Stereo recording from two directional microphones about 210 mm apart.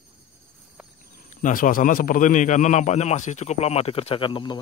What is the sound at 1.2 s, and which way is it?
A man's voice, 40° left (ahead or behind).